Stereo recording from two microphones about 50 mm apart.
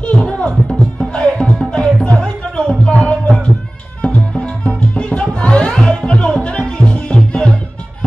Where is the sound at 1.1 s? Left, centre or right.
Centre.